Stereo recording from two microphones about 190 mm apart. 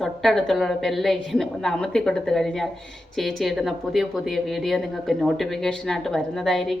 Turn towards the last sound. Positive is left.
turn(degrees=0)  # may be behind; listen again after turning